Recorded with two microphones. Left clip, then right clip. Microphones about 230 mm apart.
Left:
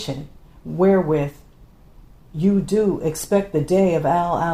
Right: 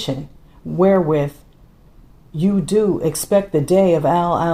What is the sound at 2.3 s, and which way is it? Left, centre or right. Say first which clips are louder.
Speech: right 2 dB; right.